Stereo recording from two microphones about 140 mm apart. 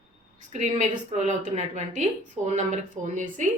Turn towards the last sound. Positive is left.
turn(degrees=-60)  # may be behind; listen again after turning